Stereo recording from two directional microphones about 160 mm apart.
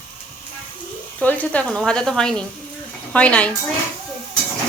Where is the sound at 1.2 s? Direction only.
10° left (ahead or behind).